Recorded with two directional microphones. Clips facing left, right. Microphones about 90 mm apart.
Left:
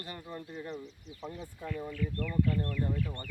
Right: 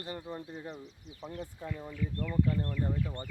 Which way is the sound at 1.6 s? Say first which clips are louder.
Left 4 dB; 15° right (ahead or behind).